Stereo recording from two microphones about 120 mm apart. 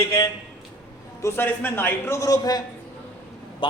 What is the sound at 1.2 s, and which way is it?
A man's voice, 15° left (ahead or behind).